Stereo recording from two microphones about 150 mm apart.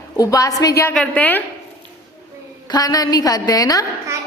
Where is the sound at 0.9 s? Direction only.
10° left (ahead or behind).